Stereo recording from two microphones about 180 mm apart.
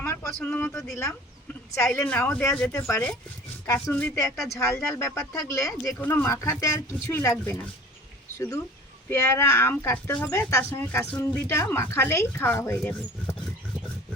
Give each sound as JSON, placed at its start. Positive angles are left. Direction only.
{"t": 0.0, "sound": "a sound", "side_deg": 10}
{"t": 0.7, "sound": "speech", "side_deg": 0}
{"t": 1.8, "sound": "speech", "side_deg": 15}